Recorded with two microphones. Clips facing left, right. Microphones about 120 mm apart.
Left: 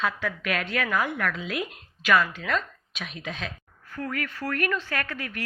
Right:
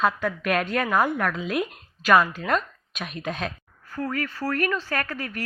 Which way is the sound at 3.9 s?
35° right (ahead or behind).